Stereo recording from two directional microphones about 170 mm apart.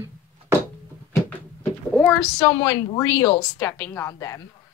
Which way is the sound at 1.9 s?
5° left (ahead or behind).